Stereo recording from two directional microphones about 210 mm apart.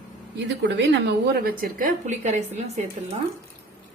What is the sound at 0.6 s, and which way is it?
A woman's voice, 60° right (ahead or behind).